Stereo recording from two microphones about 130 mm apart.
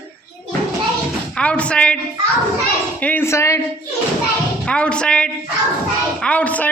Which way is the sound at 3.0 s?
15° left (ahead or behind).